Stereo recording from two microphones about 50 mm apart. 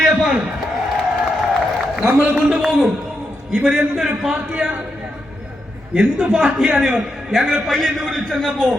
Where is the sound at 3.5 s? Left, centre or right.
Centre.